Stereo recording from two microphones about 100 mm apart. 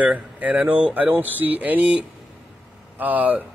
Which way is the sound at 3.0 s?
15° right (ahead or behind).